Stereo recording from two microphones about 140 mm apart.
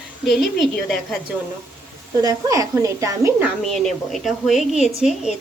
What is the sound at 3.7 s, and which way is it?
A woman's voice, centre (ahead or behind).